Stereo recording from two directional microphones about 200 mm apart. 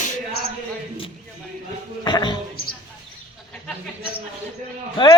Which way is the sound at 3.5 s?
Centre (ahead or behind).